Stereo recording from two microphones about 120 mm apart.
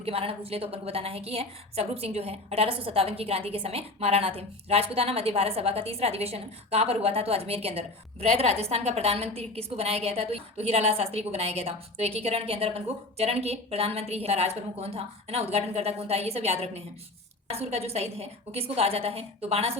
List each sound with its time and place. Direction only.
0.0 s a woman's voice: 55° right (ahead or behind)